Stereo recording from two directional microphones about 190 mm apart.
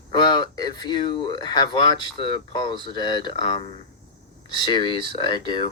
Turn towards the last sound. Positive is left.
turn(degrees=25)  # may be behind; listen again after turning